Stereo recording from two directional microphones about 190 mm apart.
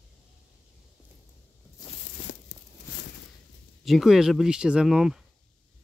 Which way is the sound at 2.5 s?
65° left (ahead or behind).